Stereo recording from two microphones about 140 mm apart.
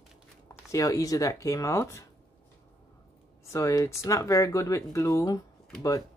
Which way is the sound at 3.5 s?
25° left (ahead or behind).